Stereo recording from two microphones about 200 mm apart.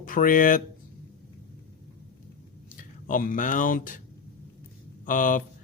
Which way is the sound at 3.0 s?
40° left (ahead or behind).